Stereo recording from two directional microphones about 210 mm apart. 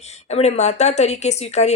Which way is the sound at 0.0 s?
30° left (ahead or behind).